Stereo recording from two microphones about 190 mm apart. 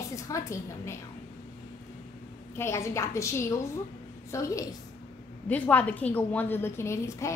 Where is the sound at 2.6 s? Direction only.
15° left (ahead or behind).